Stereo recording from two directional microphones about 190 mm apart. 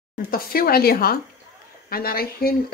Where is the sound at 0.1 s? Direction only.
50° left (ahead or behind).